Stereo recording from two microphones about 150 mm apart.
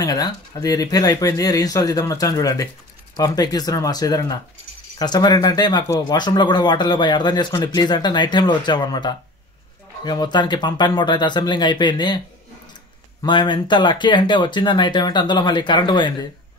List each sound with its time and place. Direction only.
0.0 s speech: 25° left (ahead or behind)
13.2 s speech: 30° left (ahead or behind)